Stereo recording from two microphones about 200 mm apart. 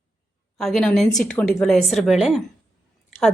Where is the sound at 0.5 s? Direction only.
Centre (ahead or behind).